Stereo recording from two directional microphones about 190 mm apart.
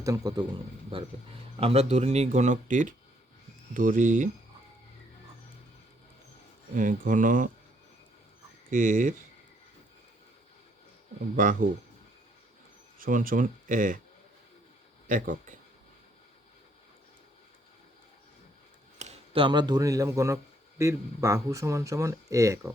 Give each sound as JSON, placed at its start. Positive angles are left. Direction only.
{"t": 0.0, "sound": "a man's voice", "side_deg": -20}
{"t": 1.5, "sound": "speech", "side_deg": -30}
{"t": 6.7, "sound": "speech", "side_deg": -45}
{"t": 8.7, "sound": "speech", "side_deg": -45}
{"t": 11.3, "sound": "speech", "side_deg": -45}
{"t": 13.0, "sound": "speech", "side_deg": -45}
{"t": 15.0, "sound": "speech", "side_deg": -45}
{"t": 18.9, "sound": "speech", "side_deg": -30}